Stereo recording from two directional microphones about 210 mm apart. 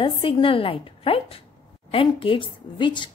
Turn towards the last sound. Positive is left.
turn(degrees=20)  # may be behind; listen again after turning